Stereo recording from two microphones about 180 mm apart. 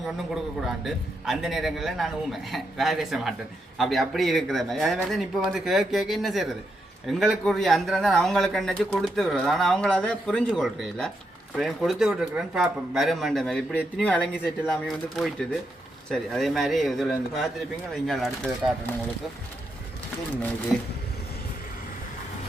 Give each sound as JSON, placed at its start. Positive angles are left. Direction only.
{"t": 0.9, "sound": "speech", "side_deg": 0}